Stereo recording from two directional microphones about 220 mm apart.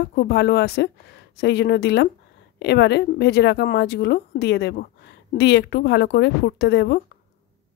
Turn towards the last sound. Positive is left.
turn(degrees=50)  # may be behind; listen again after turning